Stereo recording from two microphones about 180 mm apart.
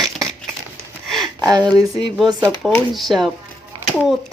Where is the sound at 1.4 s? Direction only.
20° right (ahead or behind).